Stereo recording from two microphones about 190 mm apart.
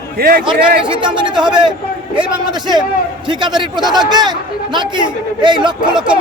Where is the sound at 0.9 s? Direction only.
25° right (ahead or behind).